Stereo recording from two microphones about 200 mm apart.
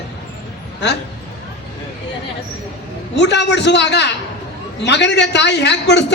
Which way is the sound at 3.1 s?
60° left (ahead or behind).